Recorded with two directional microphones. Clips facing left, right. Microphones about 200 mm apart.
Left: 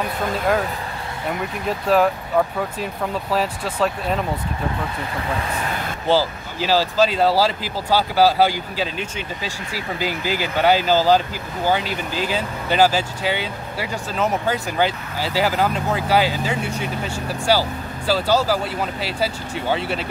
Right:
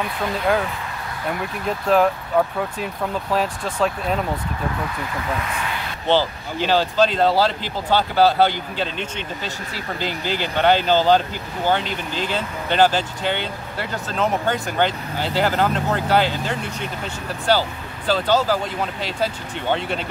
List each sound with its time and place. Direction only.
1.7 s speech: centre (ahead or behind)
5.4 s speech: 40° left (ahead or behind)
6.0 s speech: 5° left (ahead or behind)